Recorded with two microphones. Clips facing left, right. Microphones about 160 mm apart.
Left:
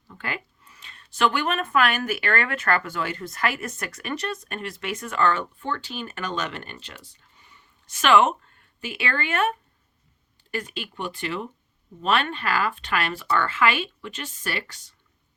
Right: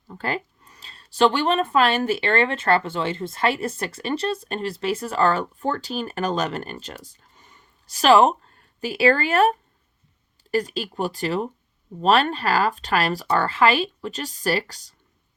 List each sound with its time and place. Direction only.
0.1 s speech: 35° right (ahead or behind)